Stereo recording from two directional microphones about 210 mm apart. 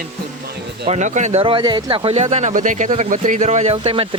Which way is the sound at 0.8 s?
35° right (ahead or behind).